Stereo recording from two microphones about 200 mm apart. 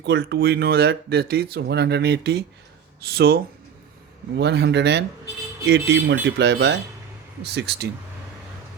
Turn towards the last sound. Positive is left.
turn(degrees=-55)  # may be behind; listen again after turning